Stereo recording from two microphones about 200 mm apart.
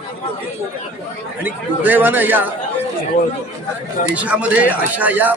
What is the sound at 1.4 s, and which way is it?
A man's voice, 10° right (ahead or behind).